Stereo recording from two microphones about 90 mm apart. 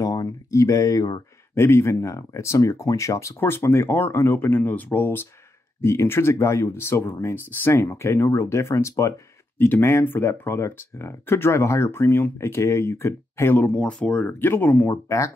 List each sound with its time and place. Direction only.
0.0 s speech: 45° left (ahead or behind)
1.5 s speech: 30° left (ahead or behind)
9.6 s speech: 25° left (ahead or behind)
13.7 s speech: 10° left (ahead or behind)
15.0 s speech: 35° left (ahead or behind)